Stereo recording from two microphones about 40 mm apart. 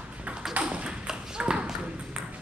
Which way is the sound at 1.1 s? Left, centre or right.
Centre.